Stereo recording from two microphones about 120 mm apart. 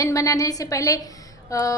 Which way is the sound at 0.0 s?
30° left (ahead or behind).